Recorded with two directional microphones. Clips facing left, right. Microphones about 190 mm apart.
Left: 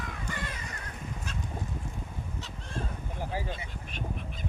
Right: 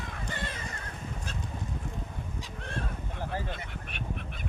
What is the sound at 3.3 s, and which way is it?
Duck, 10° left (ahead or behind).